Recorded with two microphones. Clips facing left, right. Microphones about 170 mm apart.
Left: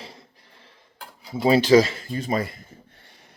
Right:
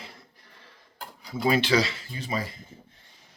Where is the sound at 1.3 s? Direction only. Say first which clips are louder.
Left 5 dB; 25° left (ahead or behind).